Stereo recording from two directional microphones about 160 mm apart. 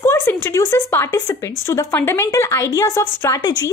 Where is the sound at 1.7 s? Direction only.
15° left (ahead or behind).